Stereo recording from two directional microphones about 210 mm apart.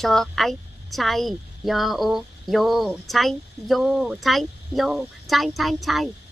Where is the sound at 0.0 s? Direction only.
Centre (ahead or behind).